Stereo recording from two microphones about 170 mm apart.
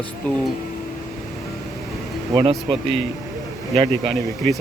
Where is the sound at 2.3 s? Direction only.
30° right (ahead or behind).